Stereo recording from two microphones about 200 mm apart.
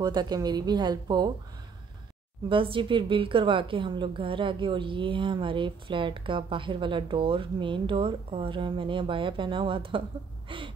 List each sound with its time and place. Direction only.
0.0 s a woman's voice: 20° right (ahead or behind)
2.5 s a woman's voice: 25° right (ahead or behind)